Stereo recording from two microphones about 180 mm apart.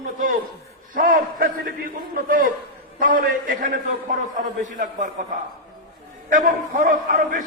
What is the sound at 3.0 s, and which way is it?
A man's voice, 50° right (ahead or behind).